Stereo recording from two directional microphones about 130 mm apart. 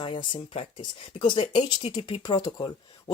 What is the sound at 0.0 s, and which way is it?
Speech, 40° left (ahead or behind).